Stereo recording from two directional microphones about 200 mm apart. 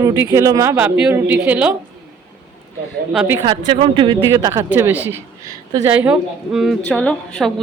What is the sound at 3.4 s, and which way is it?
A woman's voice, 25° right (ahead or behind).